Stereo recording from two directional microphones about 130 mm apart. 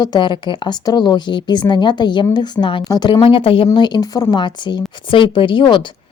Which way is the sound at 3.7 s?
35° left (ahead or behind).